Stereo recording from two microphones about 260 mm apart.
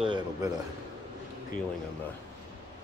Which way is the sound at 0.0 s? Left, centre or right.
Centre.